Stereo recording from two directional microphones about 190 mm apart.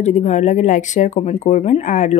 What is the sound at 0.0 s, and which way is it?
Speech, 40° left (ahead or behind).